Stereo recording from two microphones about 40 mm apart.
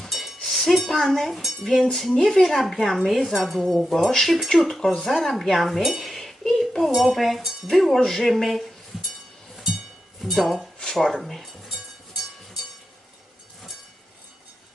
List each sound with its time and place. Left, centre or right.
0.0 s a sound: centre
0.8 s speech: centre
1.8 s speech: centre
8.9 s music: centre
10.2 s speech: centre